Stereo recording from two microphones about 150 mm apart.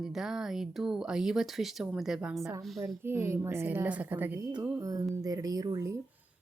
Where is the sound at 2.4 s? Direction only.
20° right (ahead or behind).